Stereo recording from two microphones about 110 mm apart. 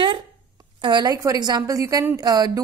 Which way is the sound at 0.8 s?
40° right (ahead or behind).